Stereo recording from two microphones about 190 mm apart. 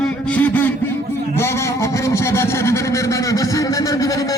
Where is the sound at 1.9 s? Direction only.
15° left (ahead or behind).